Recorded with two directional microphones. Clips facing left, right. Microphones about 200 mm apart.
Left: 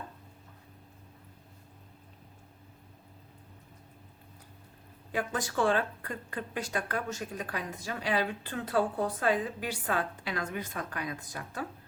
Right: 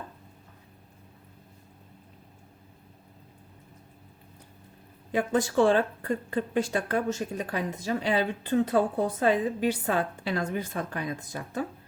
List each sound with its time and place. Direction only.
5.1 s speech: 25° right (ahead or behind)